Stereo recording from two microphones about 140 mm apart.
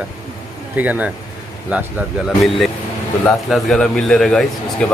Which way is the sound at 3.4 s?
Centre (ahead or behind).